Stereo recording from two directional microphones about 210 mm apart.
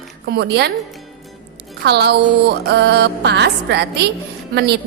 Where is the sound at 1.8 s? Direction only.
50° right (ahead or behind).